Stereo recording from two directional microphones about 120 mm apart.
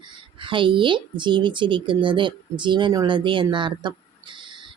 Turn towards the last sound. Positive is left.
turn(degrees=-40)  # may be behind; listen again after turning